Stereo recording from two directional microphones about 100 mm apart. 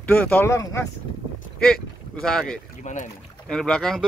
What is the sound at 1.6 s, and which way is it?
Speech, 5° left (ahead or behind).